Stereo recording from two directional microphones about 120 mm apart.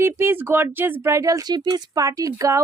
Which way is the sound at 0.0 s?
20° right (ahead or behind).